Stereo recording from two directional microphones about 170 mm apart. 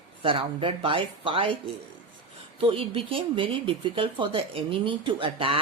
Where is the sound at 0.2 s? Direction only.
30° right (ahead or behind).